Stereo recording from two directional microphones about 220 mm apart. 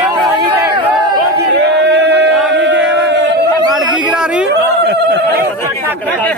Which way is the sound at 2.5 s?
55° right (ahead or behind).